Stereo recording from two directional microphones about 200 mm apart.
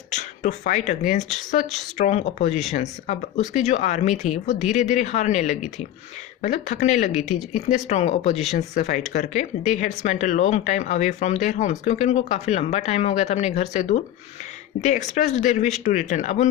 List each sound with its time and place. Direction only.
0.1 s speech: 35° left (ahead or behind)